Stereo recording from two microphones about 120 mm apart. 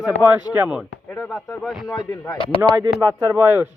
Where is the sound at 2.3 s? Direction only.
45° left (ahead or behind).